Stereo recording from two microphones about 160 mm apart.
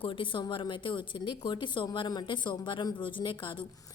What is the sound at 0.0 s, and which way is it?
A woman's voice, 30° left (ahead or behind).